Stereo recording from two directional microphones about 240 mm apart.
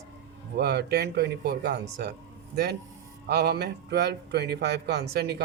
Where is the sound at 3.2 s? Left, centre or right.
Right.